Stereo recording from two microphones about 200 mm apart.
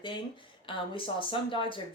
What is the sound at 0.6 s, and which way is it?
Speech, 25° left (ahead or behind).